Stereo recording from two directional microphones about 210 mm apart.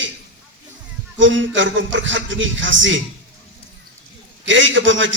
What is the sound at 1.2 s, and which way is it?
A man's voice, 60° right (ahead or behind).